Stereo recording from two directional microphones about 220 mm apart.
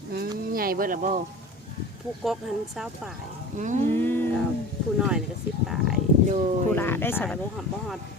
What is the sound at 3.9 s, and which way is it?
Speech, 10° left (ahead or behind).